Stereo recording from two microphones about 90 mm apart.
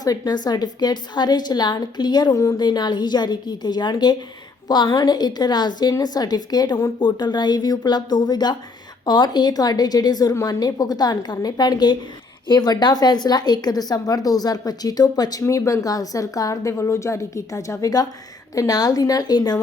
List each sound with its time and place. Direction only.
0.0 s a woman's voice: 45° left (ahead or behind)